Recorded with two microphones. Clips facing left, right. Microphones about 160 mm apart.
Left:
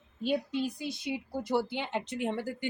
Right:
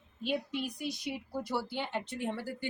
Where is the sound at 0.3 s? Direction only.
30° left (ahead or behind).